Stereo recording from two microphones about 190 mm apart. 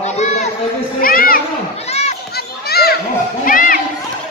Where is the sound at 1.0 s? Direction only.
50° left (ahead or behind).